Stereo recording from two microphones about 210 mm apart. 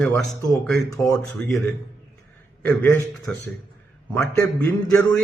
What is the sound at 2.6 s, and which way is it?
A man's voice, 10° left (ahead or behind).